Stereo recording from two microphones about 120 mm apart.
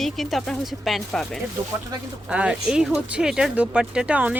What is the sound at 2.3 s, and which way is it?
Speech, 10° right (ahead or behind).